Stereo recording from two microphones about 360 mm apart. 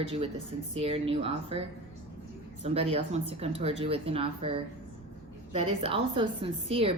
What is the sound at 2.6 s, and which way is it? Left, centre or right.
Speech, centre.